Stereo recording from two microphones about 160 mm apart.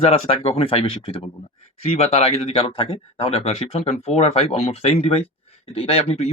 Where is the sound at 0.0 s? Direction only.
35° left (ahead or behind).